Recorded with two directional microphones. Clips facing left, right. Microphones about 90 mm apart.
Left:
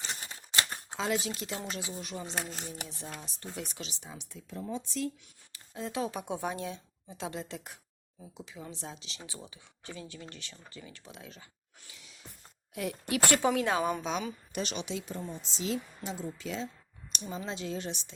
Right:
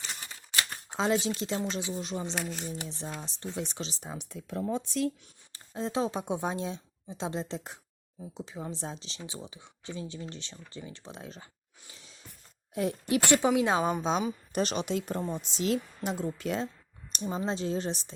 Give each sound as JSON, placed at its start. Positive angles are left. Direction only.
{"t": 0.1, "sound": "typewriter", "side_deg": 30}
{"t": 0.9, "sound": "a woman's voice", "side_deg": -30}
{"t": 4.1, "sound": "speech", "side_deg": -55}
{"t": 5.5, "sound": "speech", "side_deg": -30}
{"t": 9.2, "sound": "a woman's voice", "side_deg": -20}
{"t": 11.9, "sound": "gasp", "side_deg": -35}
{"t": 12.7, "sound": "a woman's voice", "side_deg": -30}
{"t": 17.1, "sound": "speech", "side_deg": -40}